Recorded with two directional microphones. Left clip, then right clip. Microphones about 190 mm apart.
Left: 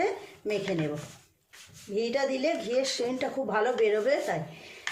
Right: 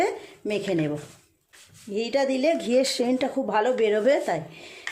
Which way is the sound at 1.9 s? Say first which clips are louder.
Right 4 dB; 50° right (ahead or behind).